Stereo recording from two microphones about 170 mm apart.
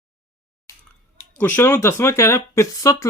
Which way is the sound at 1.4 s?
10° left (ahead or behind).